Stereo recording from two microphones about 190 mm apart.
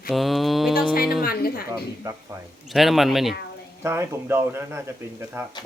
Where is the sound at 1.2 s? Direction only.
50° left (ahead or behind).